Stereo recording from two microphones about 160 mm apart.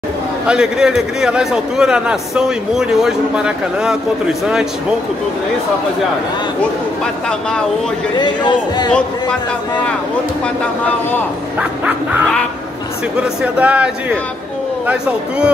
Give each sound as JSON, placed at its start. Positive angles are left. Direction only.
{"t": 0.5, "sound": "a man's voice", "side_deg": -5}
{"t": 8.2, "sound": "a man's voice", "side_deg": 25}
{"t": 13.4, "sound": "speech", "side_deg": -10}
{"t": 14.9, "sound": "speech", "side_deg": -5}